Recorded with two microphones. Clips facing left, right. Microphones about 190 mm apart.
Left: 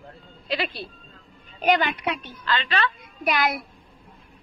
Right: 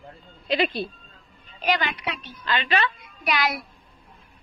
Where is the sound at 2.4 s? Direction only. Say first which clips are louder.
Right 1 dB; 15° right (ahead or behind).